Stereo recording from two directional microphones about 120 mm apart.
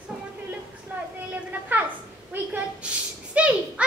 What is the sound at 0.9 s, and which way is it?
Vehicle, 15° right (ahead or behind).